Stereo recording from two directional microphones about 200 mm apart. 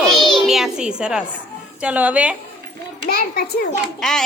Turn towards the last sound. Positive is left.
turn(degrees=5)  # may be behind; listen again after turning